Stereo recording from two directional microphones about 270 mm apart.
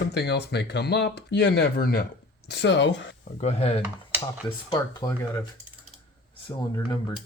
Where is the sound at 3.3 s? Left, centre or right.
Left.